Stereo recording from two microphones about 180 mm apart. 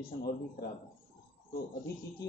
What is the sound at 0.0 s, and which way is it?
Speech, 60° left (ahead or behind).